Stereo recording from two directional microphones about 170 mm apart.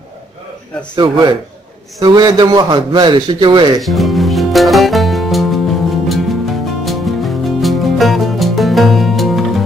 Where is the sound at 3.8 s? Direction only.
Centre (ahead or behind).